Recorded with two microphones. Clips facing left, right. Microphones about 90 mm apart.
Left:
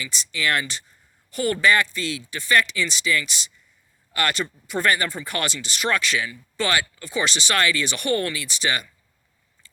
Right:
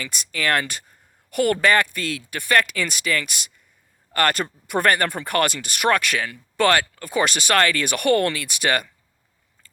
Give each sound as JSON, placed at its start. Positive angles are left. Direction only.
{"t": 0.0, "sound": "speech", "side_deg": -50}